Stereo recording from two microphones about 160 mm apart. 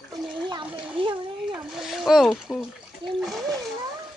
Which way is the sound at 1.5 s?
5° right (ahead or behind).